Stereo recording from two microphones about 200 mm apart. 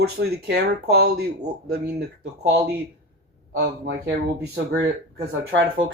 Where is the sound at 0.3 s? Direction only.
55° right (ahead or behind).